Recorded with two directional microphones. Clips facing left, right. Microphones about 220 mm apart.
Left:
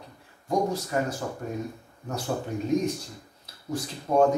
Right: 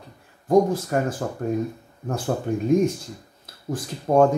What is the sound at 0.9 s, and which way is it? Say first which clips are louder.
Speech: right 4 dB; 55° right (ahead or behind).